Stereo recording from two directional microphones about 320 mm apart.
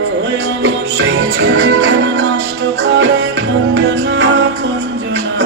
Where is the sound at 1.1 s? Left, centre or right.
Right.